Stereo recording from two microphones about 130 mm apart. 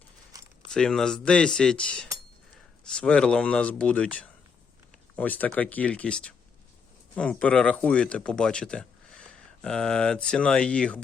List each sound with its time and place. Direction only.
0.7 s speech: 5° left (ahead or behind)